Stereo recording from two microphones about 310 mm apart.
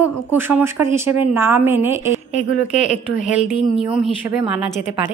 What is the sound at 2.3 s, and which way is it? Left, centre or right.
Speech, left.